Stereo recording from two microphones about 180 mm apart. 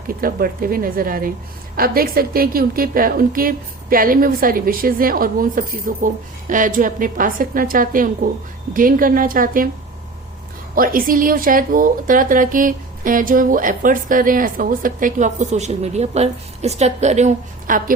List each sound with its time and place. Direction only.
0.1 s a woman's voice: 55° right (ahead or behind)
10.8 s a woman's voice: 55° right (ahead or behind)